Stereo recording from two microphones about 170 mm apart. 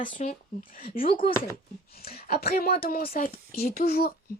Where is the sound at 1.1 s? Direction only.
30° left (ahead or behind).